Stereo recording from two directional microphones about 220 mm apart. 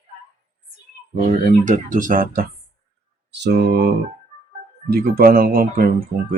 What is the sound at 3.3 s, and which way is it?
Mantra, 50° right (ahead or behind).